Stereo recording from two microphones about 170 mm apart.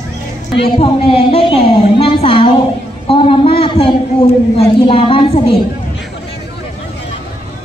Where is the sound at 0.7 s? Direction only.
35° left (ahead or behind).